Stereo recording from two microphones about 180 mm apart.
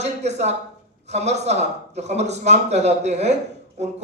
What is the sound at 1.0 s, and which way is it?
A man's voice, 40° right (ahead or behind).